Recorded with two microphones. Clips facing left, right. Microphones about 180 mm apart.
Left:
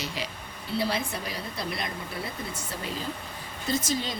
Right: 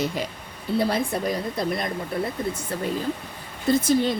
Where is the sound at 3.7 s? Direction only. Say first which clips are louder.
Right 9 dB; 55° right (ahead or behind).